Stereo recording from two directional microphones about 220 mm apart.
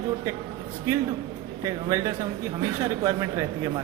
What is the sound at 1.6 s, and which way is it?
Speech, 15° right (ahead or behind).